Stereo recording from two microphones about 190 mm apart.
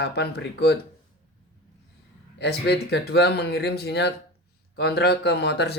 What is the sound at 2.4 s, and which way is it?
Speech, 65° left (ahead or behind).